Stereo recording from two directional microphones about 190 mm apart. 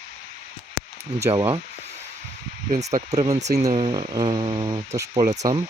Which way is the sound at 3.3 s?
35° right (ahead or behind).